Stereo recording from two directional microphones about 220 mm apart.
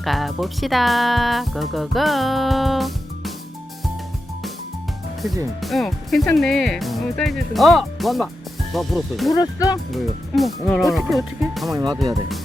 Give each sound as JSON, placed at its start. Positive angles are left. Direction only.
{"t": 0.0, "sound": "speech", "side_deg": 0}
{"t": 5.5, "sound": "speech", "side_deg": 0}
{"t": 9.3, "sound": "speech", "side_deg": 15}
{"t": 9.9, "sound": "speech", "side_deg": 0}